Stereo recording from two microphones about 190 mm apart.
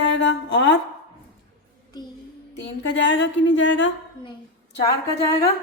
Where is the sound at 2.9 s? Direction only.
75° left (ahead or behind).